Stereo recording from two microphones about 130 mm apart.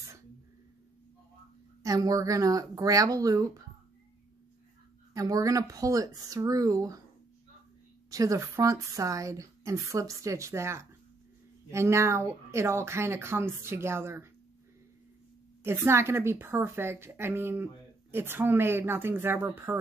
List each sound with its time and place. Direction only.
1.8 s speech: 25° right (ahead or behind)
5.1 s speech: 25° right (ahead or behind)
8.1 s speech: 25° right (ahead or behind)
15.6 s speech: 20° right (ahead or behind)